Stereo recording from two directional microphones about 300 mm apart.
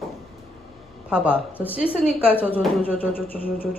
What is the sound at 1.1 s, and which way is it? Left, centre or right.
Speech, centre.